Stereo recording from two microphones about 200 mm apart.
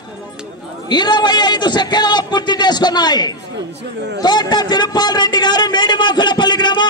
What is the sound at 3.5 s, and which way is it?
Speech, 60° right (ahead or behind).